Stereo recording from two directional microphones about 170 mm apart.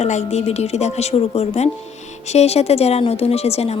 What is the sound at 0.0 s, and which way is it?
Speech, 40° left (ahead or behind).